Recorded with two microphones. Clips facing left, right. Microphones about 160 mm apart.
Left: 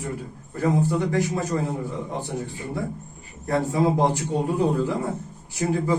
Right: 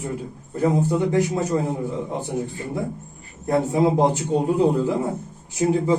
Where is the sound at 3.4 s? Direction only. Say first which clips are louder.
Right 3 dB; 20° right (ahead or behind).